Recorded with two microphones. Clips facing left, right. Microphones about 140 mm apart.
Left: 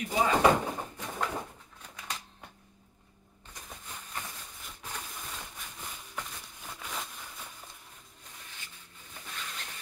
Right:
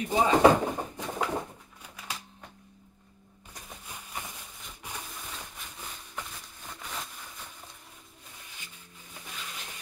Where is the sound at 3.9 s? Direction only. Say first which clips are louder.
Right 1 dB; 10° right (ahead or behind).